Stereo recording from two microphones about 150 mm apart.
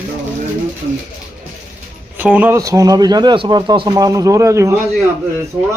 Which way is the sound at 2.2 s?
10° right (ahead or behind).